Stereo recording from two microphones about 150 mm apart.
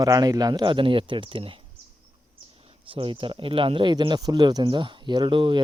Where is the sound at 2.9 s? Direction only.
35° right (ahead or behind).